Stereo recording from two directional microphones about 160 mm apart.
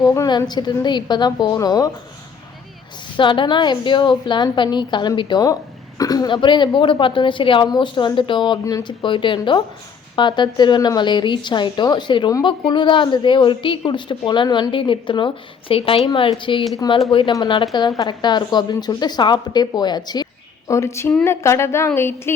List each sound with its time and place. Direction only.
0.0 s speech: 20° left (ahead or behind)
3.2 s a woman's voice: 30° left (ahead or behind); by 22.4 s 15° left (ahead or behind)